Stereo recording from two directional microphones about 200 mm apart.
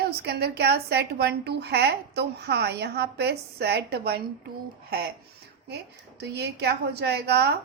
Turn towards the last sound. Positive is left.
turn(degrees=-55)  # may be behind; listen again after turning